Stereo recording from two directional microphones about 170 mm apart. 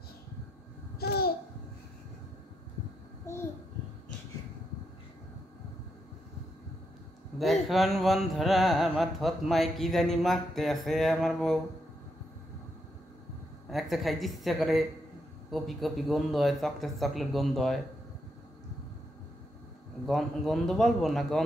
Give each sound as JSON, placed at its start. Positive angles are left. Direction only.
{"t": 0.9, "sound": "babbling", "side_deg": 65}
{"t": 7.6, "sound": "speech", "side_deg": 0}
{"t": 13.7, "sound": "speech", "side_deg": 0}
{"t": 20.1, "sound": "speech", "side_deg": 0}